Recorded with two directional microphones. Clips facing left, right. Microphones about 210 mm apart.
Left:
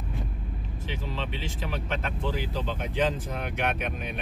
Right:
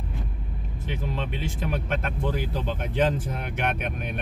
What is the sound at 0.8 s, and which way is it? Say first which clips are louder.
Speech: right 3 dB; 50° right (ahead or behind).